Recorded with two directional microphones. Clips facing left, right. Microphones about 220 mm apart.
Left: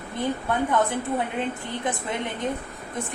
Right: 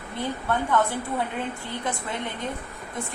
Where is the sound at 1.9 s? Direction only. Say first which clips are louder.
Left 3 dB; 20° left (ahead or behind).